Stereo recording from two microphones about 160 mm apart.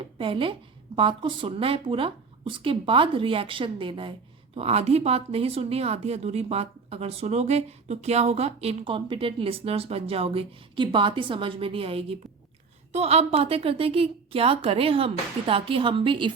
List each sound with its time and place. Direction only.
0.2 s speech: 30° right (ahead or behind)